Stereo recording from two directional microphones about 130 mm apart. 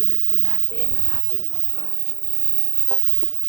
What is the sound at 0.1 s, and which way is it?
Speech, 35° right (ahead or behind).